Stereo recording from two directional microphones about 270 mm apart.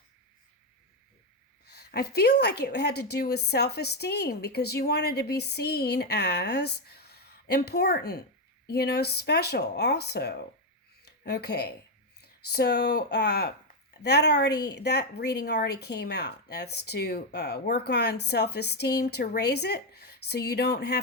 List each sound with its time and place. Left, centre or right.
1.7 s a woman's voice: left